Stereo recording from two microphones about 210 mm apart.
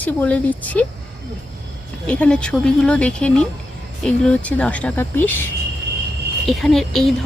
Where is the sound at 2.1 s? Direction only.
5° left (ahead or behind).